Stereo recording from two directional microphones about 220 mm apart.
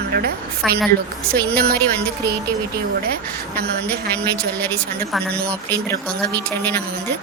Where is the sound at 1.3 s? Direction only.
45° right (ahead or behind).